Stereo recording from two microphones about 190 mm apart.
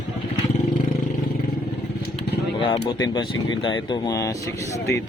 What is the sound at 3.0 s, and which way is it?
Speech, 25° left (ahead or behind).